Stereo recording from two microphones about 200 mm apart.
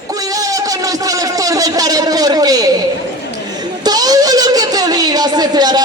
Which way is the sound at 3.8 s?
20° right (ahead or behind).